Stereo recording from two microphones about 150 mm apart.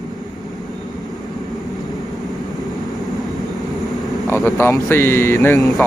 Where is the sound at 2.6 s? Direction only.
Centre (ahead or behind).